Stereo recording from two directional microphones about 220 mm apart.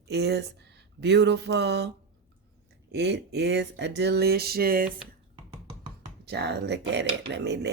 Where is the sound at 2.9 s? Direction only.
50° right (ahead or behind).